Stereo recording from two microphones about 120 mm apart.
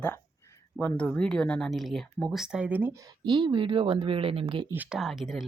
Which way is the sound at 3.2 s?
40° right (ahead or behind).